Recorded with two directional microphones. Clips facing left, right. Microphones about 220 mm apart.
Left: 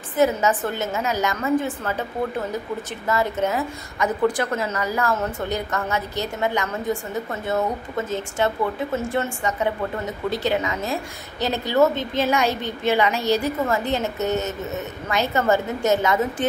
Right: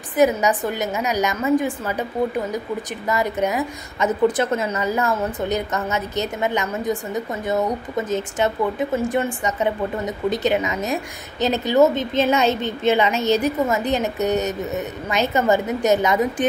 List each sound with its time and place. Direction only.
0.1 s a woman's voice: 15° right (ahead or behind)
3.1 s a woman's voice: 15° right (ahead or behind)